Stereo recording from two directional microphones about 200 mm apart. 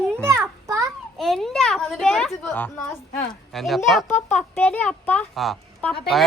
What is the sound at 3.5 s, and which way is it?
A woman's voice, centre (ahead or behind).